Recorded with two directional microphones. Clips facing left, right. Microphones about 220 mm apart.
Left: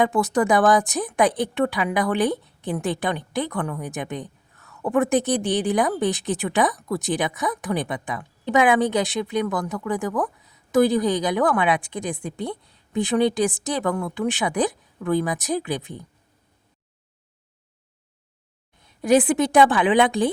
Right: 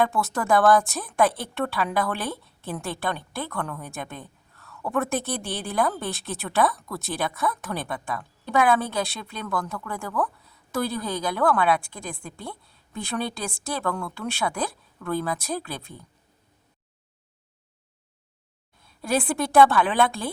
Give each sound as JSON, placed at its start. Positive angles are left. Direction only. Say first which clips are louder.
{"t": 0.0, "sound": "speech", "louder": "left 5 dB", "side_deg": 15}
{"t": 18.8, "sound": "speech", "louder": "left 8 dB", "side_deg": 20}